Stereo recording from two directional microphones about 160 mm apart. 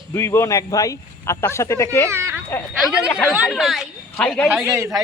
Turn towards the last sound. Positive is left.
turn(degrees=-20)  # may be behind; listen again after turning